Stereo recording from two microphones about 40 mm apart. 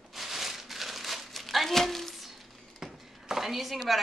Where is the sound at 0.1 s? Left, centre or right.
Centre.